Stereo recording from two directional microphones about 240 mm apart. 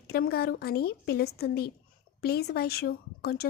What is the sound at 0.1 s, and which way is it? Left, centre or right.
Speech, left.